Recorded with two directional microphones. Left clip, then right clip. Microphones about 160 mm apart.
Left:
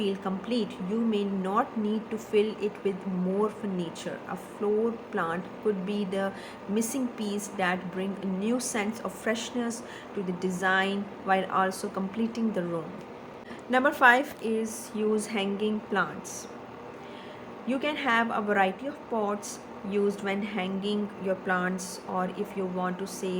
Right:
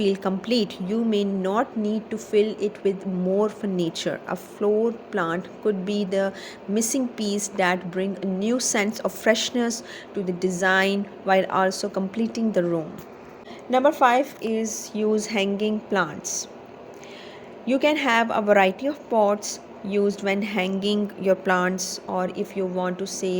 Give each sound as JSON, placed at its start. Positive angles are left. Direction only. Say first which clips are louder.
{"t": 0.0, "sound": "a woman's voice", "louder": "right 7 dB", "side_deg": -50}
{"t": 3.8, "sound": "a woman's voice", "louder": "right 9 dB", "side_deg": -50}
{"t": 13.7, "sound": "a woman's voice", "louder": "right 3 dB", "side_deg": -15}
{"t": 14.4, "sound": "a woman's voice", "louder": "right 4 dB", "side_deg": -45}
{"t": 17.7, "sound": "a woman's voice", "louder": "right 7 dB", "side_deg": -45}
{"t": 22.1, "sound": "a woman's voice", "louder": "right 4 dB", "side_deg": -45}